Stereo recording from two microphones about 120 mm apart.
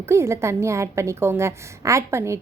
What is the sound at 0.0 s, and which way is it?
A woman's voice, 20° right (ahead or behind).